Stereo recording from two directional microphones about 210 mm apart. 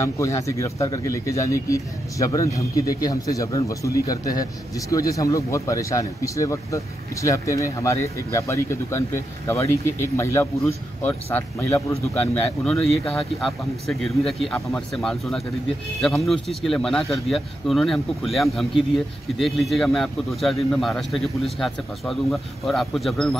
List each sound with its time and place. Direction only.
0.0 s speech: 15° left (ahead or behind)
12.9 s speech: 30° left (ahead or behind)
13.4 s speech: centre (ahead or behind)